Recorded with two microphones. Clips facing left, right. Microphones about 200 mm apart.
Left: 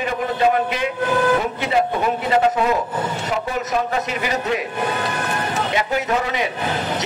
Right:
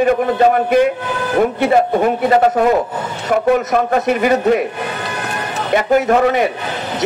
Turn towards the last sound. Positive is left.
turn(degrees=-50)  # may be behind; listen again after turning